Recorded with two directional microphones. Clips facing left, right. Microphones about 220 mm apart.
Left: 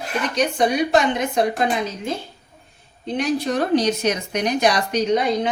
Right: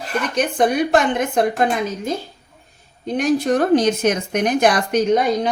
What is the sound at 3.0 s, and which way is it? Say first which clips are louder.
Speech: right 4 dB; 45° right (ahead or behind).